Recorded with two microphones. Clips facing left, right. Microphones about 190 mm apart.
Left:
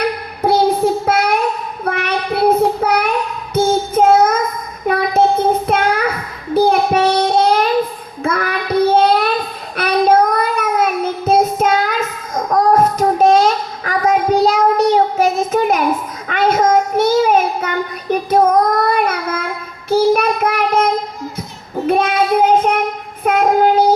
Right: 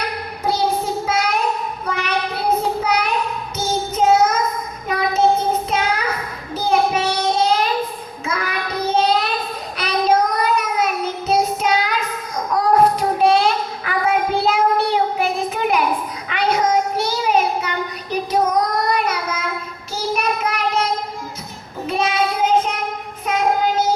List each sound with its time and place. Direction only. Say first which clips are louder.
1.0 s child singing: left 4 dB; 55° left (ahead or behind)
21.8 s child singing: left 5 dB; 55° left (ahead or behind)